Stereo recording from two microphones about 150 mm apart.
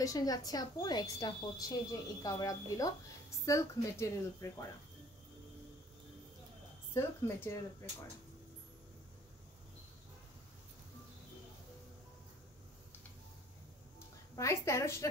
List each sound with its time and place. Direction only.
0.0 s a woman's voice: 25° left (ahead or behind)
6.9 s speech: 15° left (ahead or behind)
14.3 s a woman's voice: 20° left (ahead or behind)